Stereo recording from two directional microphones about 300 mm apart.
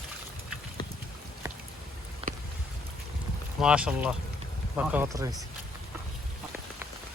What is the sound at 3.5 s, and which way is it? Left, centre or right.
Speech, centre.